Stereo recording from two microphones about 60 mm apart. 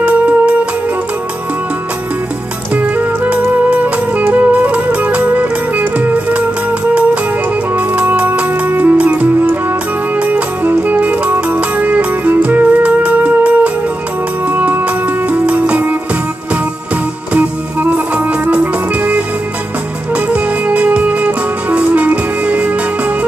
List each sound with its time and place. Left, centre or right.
0.0 s music: right
2.7 s music: right
14.5 s music: right